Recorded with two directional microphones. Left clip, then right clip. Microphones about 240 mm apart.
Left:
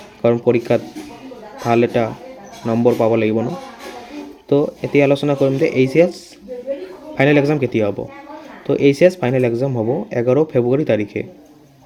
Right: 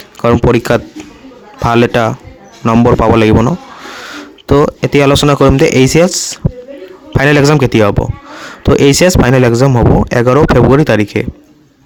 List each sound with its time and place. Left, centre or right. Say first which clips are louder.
0.2 s a man's voice: right 5 dB; right